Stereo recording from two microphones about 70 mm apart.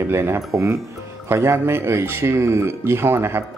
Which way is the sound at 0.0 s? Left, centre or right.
Right.